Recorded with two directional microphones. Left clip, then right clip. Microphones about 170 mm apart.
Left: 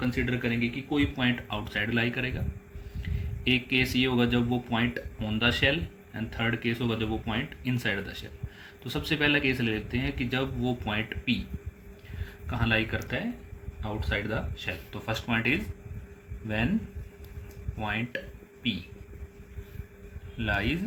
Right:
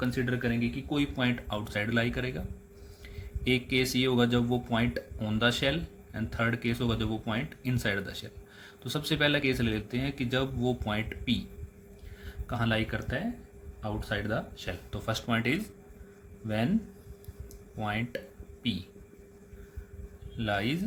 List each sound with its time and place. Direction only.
0.0 s speech: 65° right (ahead or behind)
3.4 s speech: 60° right (ahead or behind)
12.5 s speech: 60° right (ahead or behind)
17.7 s speech: 60° right (ahead or behind)
20.4 s speech: 60° right (ahead or behind)